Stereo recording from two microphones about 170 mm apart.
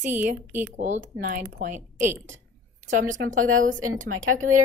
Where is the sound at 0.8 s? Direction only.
45° right (ahead or behind).